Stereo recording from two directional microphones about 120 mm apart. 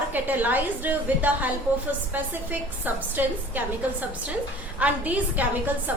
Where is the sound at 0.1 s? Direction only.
15° right (ahead or behind).